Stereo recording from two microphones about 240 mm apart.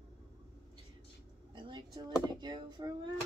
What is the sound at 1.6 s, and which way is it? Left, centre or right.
Speech, centre.